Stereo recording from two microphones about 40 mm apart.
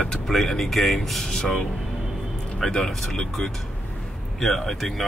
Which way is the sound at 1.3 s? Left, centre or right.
Centre.